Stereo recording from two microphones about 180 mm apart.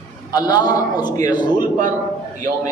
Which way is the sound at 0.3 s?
20° left (ahead or behind).